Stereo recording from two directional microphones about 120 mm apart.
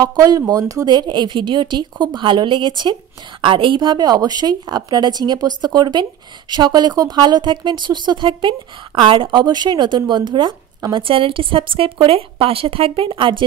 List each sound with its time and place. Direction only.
0.0 s speech: 35° right (ahead or behind)